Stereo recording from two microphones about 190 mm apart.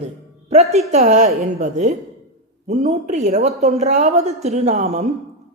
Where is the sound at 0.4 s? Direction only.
35° right (ahead or behind).